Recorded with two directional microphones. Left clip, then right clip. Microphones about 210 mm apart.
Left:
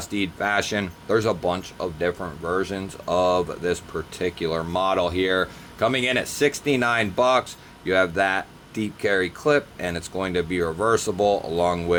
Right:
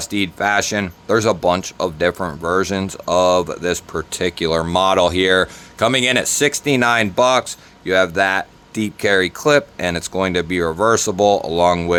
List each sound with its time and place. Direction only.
0.0 s speech: 25° right (ahead or behind)